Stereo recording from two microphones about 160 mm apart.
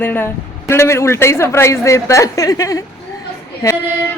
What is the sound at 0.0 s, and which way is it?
A woman's voice, 15° left (ahead or behind).